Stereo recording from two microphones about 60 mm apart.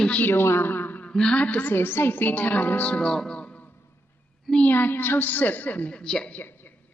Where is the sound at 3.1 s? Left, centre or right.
Centre.